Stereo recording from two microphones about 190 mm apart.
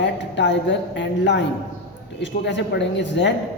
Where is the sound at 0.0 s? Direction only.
70° left (ahead or behind).